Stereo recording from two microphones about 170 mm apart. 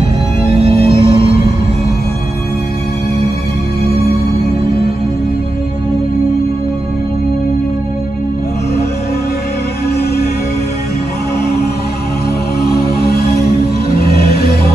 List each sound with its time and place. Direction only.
0.7 s music: 75° left (ahead or behind)
13.9 s music: 70° left (ahead or behind)